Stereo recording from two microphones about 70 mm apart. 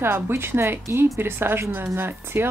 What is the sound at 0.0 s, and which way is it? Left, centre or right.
Speech, right.